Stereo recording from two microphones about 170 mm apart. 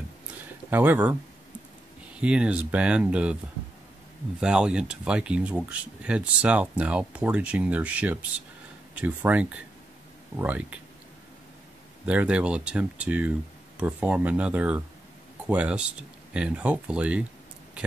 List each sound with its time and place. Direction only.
0.7 s speech: 10° right (ahead or behind)
2.1 s speech: 5° right (ahead or behind)
4.4 s speech: 5° right (ahead or behind)
12.1 s speech: 5° right (ahead or behind)